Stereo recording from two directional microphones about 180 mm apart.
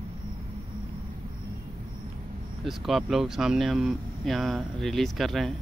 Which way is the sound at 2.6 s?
Centre (ahead or behind).